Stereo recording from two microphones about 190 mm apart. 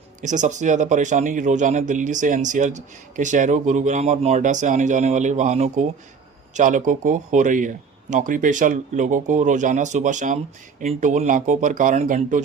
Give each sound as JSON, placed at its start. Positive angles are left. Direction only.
{"t": 0.2, "sound": "speech", "side_deg": -40}